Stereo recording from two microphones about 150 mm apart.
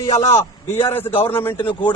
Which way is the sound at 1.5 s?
30° left (ahead or behind).